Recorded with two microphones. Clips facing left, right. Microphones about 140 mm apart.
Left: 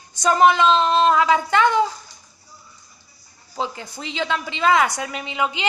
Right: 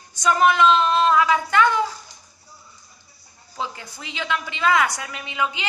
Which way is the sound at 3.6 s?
25° left (ahead or behind).